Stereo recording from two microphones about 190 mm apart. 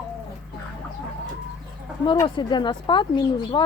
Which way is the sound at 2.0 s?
25° left (ahead or behind).